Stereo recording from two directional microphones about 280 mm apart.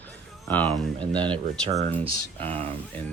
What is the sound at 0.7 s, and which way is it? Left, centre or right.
Speech, centre.